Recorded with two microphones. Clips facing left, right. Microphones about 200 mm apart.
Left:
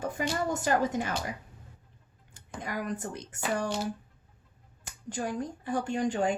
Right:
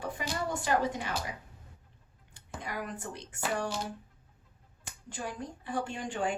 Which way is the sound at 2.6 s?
45° left (ahead or behind).